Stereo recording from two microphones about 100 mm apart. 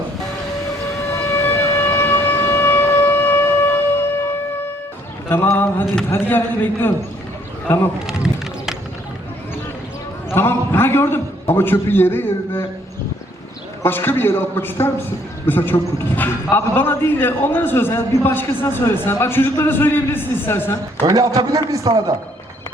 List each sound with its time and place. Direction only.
1.1 s siren: 30° left (ahead or behind)
5.3 s a sound: 20° left (ahead or behind)
6.1 s a man's voice: 20° left (ahead or behind)
8.0 s a sound: 5° right (ahead or behind)
10.3 s a man's voice: 25° left (ahead or behind)
13.8 s a man's voice: 20° left (ahead or behind)
21.1 s a man's voice: 35° right (ahead or behind)